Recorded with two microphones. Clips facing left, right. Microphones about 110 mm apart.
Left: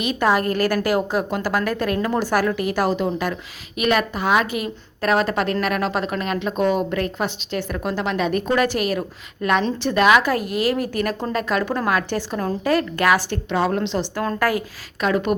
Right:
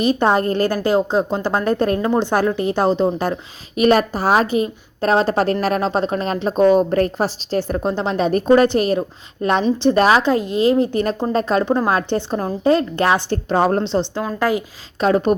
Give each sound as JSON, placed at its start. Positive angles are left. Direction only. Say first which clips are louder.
{"t": 0.0, "sound": "a woman's voice", "louder": "right 3 dB", "side_deg": -30}
{"t": 14.3, "sound": "a woman's voice", "louder": "right 3 dB", "side_deg": -20}
{"t": 15.0, "sound": "a woman's voice", "louder": "right 4 dB", "side_deg": -35}